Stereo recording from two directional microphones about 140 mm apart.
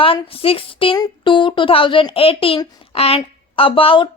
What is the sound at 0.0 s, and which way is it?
A woman's voice, 40° left (ahead or behind).